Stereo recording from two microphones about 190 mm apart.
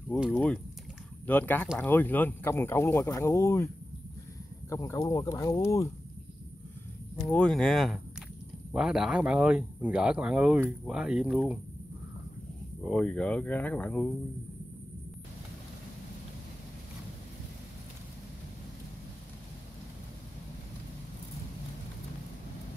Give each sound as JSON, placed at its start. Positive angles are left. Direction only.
{"t": 0.1, "sound": "speech", "side_deg": 0}
{"t": 7.2, "sound": "speech", "side_deg": 5}
{"t": 12.8, "sound": "speech", "side_deg": 5}